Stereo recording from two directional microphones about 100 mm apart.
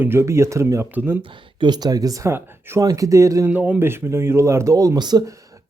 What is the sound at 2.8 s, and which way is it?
Speech, 35° right (ahead or behind).